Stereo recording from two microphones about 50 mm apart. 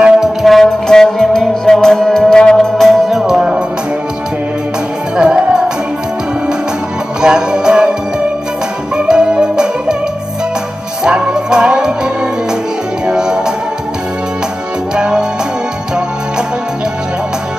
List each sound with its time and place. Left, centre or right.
0.4 s music: centre
3.1 s music: centre
3.3 s music: right
5.1 s music: centre
7.2 s music: centre
8.9 s music: centre
11.1 s music: centre
15.0 s music: centre